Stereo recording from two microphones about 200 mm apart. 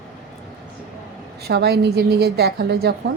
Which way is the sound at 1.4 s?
55° right (ahead or behind).